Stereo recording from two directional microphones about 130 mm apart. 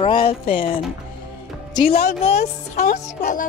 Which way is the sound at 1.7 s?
50° left (ahead or behind).